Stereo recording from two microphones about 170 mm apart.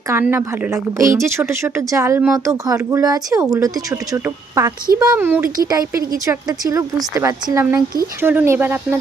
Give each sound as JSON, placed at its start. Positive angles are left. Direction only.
{"t": 0.1, "sound": "a woman's voice", "side_deg": -15}